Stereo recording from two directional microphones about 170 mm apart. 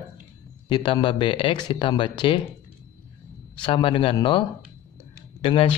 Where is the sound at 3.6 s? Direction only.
30° left (ahead or behind).